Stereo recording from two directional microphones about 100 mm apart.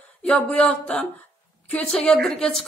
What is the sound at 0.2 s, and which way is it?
A woman's voice, 10° left (ahead or behind).